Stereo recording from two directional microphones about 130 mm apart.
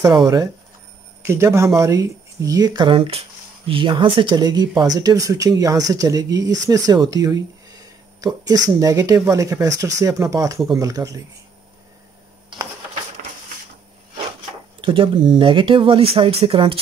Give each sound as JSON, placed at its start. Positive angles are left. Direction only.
{"t": 1.2, "sound": "speech", "side_deg": -20}
{"t": 14.8, "sound": "speech", "side_deg": -40}